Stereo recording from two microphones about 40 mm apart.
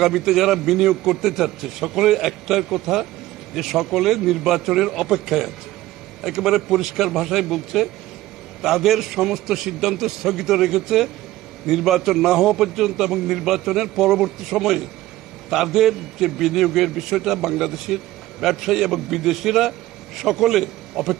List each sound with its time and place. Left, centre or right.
0.0 s a man's voice: centre